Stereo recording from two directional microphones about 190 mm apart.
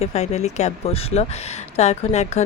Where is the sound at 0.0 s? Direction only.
35° left (ahead or behind).